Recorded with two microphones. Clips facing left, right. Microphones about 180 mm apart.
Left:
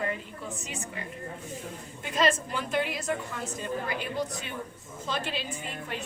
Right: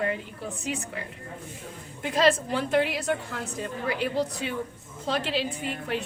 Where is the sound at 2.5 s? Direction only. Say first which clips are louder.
Right 5 dB; 75° right (ahead or behind).